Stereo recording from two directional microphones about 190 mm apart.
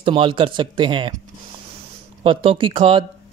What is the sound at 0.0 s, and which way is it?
Speech, 25° right (ahead or behind).